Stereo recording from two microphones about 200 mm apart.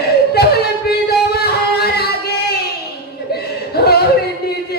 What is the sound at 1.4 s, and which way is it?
Music, 50° left (ahead or behind).